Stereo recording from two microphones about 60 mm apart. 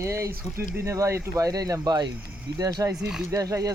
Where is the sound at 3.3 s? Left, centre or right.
Right.